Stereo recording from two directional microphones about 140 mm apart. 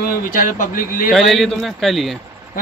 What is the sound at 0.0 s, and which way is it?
Speech, 75° left (ahead or behind).